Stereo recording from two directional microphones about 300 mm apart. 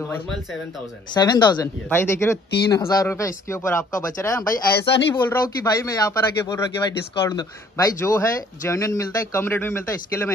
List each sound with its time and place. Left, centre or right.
1.1 s speech: centre
4.7 s speech: left
5.1 s speech: centre